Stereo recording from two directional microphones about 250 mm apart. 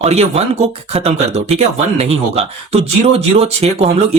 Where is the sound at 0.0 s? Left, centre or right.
Right.